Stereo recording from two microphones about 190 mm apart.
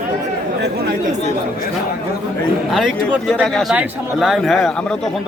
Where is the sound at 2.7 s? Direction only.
Centre (ahead or behind).